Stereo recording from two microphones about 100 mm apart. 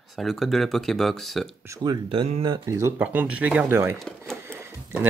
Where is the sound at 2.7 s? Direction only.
25° right (ahead or behind).